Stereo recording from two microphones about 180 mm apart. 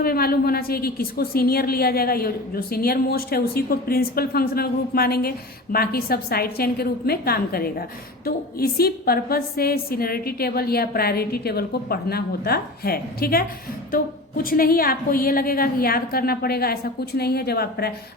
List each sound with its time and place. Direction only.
0.0 s a woman's voice: 55° left (ahead or behind)